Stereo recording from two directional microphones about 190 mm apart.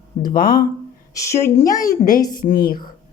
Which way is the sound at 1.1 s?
15° left (ahead or behind).